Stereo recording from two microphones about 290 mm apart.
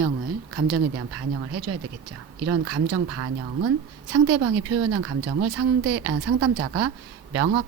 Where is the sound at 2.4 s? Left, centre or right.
Right.